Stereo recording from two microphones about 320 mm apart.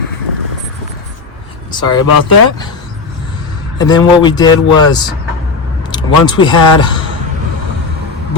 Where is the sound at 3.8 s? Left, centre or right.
Centre.